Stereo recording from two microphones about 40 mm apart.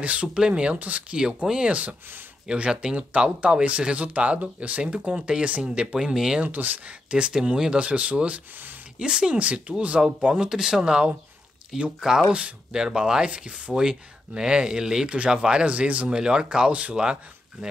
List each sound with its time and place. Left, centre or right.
0.0 s speech: right
1.1 s speech: right
1.7 s speech: right
2.4 s speech: right
6.1 s speech: centre
6.4 s speech: right
6.9 s speech: right
7.8 s speech: right
8.9 s speech: right
9.3 s speech: right
9.9 s speech: right
15.0 s speech: right
16.1 s speech: centre